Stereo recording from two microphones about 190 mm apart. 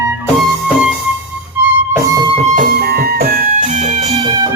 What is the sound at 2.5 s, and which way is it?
Music, 50° right (ahead or behind).